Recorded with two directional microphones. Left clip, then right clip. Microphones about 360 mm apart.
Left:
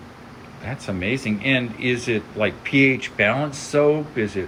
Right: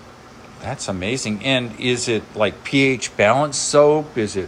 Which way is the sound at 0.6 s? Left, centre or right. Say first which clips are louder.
Right 3 dB; centre.